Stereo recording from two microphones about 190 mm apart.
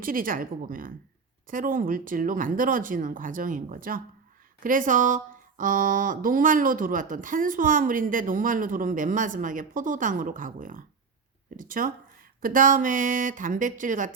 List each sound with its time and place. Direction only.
0.0 s speech: 45° right (ahead or behind)